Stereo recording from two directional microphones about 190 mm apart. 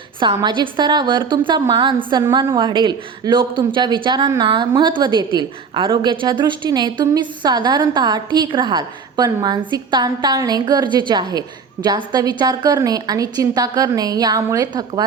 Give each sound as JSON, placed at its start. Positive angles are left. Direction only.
{"t": 0.2, "sound": "a woman's voice", "side_deg": -25}